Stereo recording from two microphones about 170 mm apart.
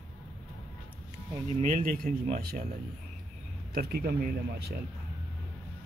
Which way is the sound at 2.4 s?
60° right (ahead or behind).